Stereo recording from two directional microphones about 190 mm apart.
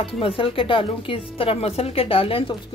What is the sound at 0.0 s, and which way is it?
A woman's voice, 30° left (ahead or behind).